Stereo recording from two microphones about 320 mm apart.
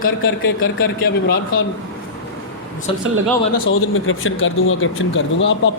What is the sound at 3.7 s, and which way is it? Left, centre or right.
Speech, left.